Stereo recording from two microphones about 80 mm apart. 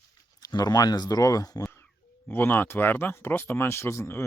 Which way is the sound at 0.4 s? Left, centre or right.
Left.